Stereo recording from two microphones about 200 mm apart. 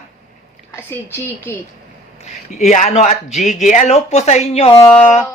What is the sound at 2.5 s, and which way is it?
Speech, 40° left (ahead or behind).